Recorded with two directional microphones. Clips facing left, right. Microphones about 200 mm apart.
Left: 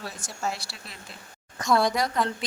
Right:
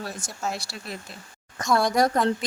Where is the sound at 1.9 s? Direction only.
45° right (ahead or behind).